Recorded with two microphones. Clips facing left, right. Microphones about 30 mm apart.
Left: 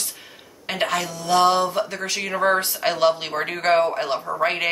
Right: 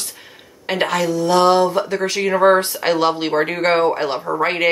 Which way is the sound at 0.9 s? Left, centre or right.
Centre.